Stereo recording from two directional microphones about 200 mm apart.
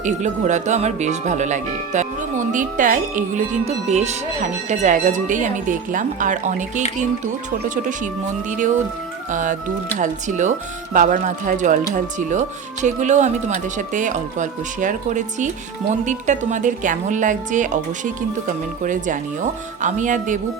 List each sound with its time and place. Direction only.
0.0 s speech: 35° right (ahead or behind)
7.9 s speech: 40° right (ahead or behind)